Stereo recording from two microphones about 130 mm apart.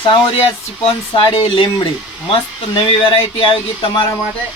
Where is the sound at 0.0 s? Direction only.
40° left (ahead or behind).